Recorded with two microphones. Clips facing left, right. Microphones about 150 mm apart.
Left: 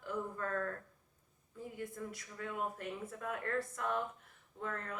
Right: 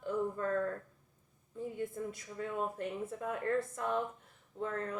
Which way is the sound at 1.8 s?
25° right (ahead or behind).